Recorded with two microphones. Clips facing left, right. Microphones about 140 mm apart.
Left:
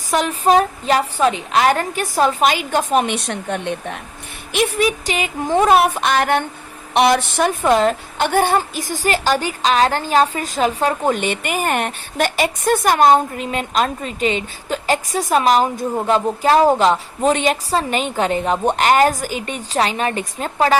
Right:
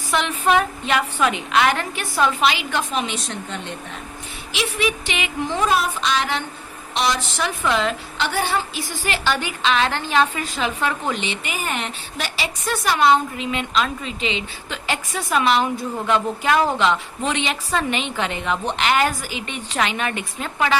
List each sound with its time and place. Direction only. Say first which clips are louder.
0.1 s a woman's voice: left 4 dB; 40° left (ahead or behind); by 4.0 s 60° left (ahead or behind)
4.5 s a woman's voice: left 6 dB; 45° left (ahead or behind)